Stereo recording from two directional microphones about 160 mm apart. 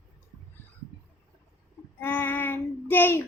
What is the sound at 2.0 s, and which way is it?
Child singing, 15° left (ahead or behind).